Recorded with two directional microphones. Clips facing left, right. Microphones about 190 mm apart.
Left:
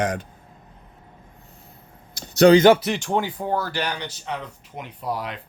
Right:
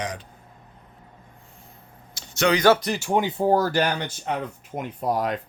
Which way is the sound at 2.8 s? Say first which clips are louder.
Even; 5° right (ahead or behind).